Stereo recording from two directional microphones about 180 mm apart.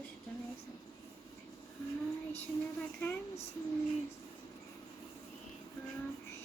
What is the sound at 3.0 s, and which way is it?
Speech, 10° left (ahead or behind).